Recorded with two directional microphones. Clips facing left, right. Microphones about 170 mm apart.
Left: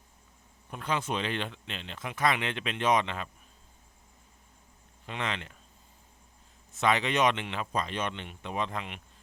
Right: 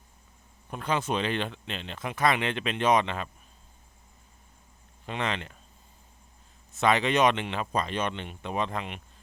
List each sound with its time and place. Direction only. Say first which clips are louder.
0.7 s speech: right 3 dB; 35° right (ahead or behind)
5.0 s speech: right 3 dB; 35° right (ahead or behind)
6.8 s speech: right 3 dB; 35° right (ahead or behind)